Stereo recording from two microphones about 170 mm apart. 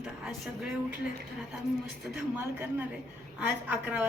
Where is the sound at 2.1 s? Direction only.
15° right (ahead or behind).